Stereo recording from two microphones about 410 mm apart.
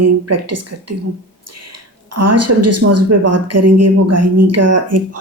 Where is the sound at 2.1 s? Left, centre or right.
Right.